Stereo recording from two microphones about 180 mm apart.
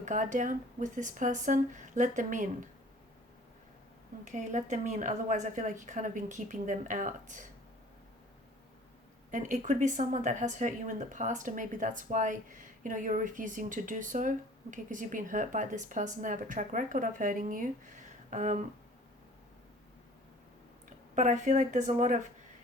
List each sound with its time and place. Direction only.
0.0 s speech: 45° right (ahead or behind)
4.3 s speech: 40° right (ahead or behind)
9.3 s speech: 45° right (ahead or behind)
21.2 s speech: 40° right (ahead or behind)